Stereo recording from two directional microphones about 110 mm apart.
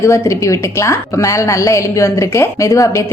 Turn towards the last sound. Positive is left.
turn(degrees=30)  # may be behind; listen again after turning